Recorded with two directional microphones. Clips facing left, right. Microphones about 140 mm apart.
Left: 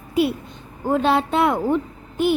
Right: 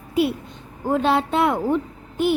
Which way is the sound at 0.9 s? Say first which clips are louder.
Left 1 dB; 90° left.